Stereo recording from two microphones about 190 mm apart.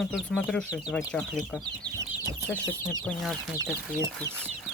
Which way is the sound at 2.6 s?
20° left (ahead or behind).